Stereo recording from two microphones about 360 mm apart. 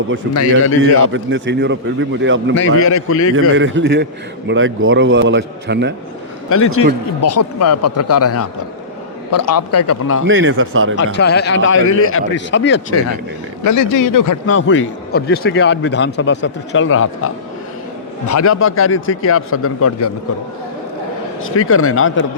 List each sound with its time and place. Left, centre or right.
0.3 s a man's voice: left
0.8 s a man's voice: right
2.8 s a man's voice: left
3.5 s a man's voice: right
6.5 s a man's voice: left
10.2 s a man's voice: right
10.9 s a man's voice: left
13.7 s a man's voice: left
14.4 s a man's voice: left
21.4 s a man's voice: left